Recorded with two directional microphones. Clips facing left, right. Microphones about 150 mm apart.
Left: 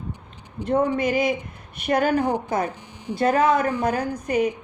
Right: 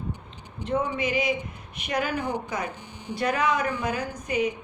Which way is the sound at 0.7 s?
55° left (ahead or behind).